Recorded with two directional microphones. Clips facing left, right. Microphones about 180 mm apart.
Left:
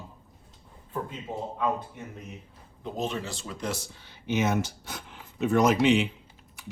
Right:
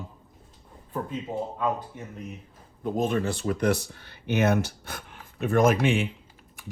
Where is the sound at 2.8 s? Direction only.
50° right (ahead or behind).